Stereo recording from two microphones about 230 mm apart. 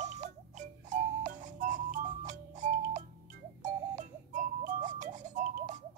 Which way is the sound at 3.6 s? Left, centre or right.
Right.